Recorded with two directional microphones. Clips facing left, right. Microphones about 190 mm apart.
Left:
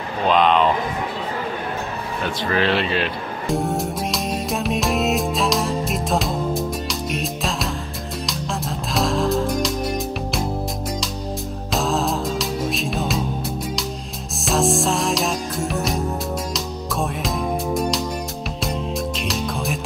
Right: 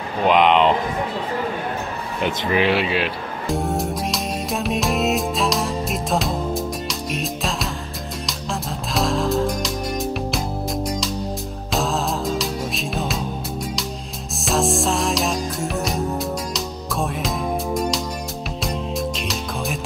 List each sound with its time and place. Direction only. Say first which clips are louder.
0.3 s speech: right 1 dB; 15° right (ahead or behind)
2.2 s music: right 2 dB; 15° right (ahead or behind); by 9.8 s centre (ahead or behind)
11.7 s music: left 1 dB; centre (ahead or behind)
14.4 s music: left 1 dB; centre (ahead or behind)